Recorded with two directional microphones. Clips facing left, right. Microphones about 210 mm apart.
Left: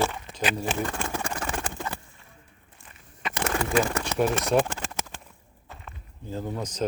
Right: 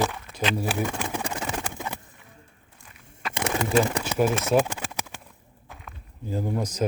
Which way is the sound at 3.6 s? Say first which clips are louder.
Right 3 dB; 20° right (ahead or behind).